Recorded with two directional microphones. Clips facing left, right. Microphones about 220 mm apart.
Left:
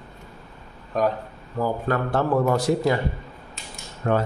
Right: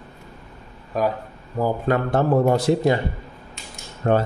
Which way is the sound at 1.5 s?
15° right (ahead or behind).